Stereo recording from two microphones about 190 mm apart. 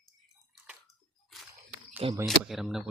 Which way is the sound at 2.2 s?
Centre (ahead or behind).